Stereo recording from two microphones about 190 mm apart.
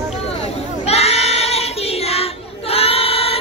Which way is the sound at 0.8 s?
35° left (ahead or behind).